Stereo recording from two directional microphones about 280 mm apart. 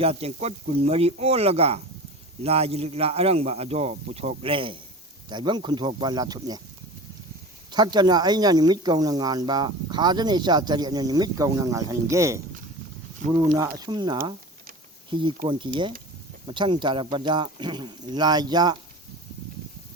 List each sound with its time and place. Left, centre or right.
0.0 s speech: right
7.7 s speech: centre
13.4 s speech: centre